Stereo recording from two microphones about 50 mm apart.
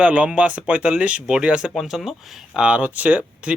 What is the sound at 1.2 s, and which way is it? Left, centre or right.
Speech, centre.